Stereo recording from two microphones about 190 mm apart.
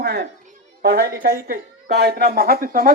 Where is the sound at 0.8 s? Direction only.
60° right (ahead or behind).